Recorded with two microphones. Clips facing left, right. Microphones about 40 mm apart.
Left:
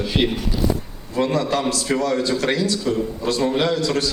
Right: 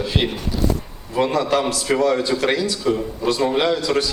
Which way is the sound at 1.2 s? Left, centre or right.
Centre.